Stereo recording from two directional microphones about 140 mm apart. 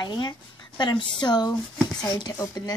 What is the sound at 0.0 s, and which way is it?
A woman's voice, 30° left (ahead or behind).